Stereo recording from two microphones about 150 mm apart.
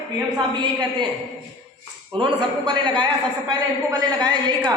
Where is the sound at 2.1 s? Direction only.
35° right (ahead or behind).